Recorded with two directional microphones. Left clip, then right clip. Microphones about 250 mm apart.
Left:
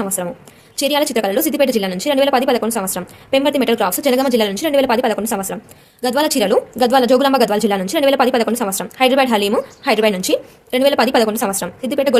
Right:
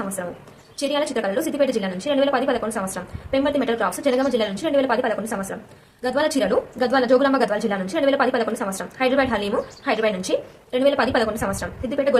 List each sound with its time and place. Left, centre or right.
0.8 s a woman's voice: left